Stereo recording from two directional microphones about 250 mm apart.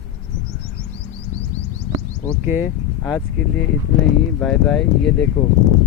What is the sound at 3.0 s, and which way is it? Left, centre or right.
Speech, centre.